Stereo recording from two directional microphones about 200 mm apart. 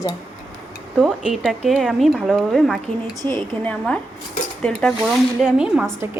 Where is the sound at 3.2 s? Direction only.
20° right (ahead or behind).